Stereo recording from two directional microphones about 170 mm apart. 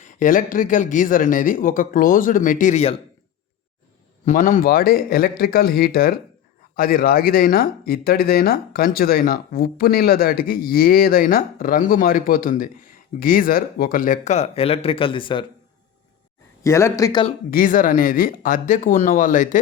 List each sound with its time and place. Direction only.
0.0 s speech: 55° left (ahead or behind)
4.3 s speech: 50° left (ahead or behind); by 15.4 s 30° left (ahead or behind)
16.6 s speech: 15° left (ahead or behind)
17.5 s speech: 55° left (ahead or behind)